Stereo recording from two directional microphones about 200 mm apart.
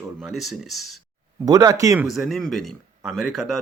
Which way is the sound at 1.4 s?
20° right (ahead or behind).